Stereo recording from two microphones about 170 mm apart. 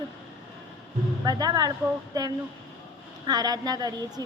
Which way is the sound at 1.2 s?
20° right (ahead or behind).